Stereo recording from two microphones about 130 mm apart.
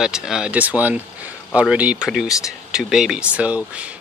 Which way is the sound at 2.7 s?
5° right (ahead or behind).